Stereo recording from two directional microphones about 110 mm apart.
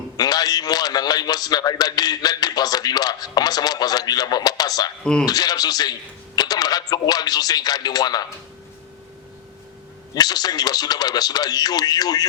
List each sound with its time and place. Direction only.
0.2 s a man's voice: 35° left (ahead or behind)
10.2 s a man's voice: 35° left (ahead or behind)